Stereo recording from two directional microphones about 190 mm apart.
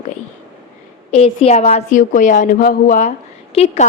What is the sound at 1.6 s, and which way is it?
A woman's voice, 40° left (ahead or behind).